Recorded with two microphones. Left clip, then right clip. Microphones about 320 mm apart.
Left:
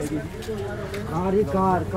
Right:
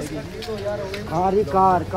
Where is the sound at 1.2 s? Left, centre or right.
Right.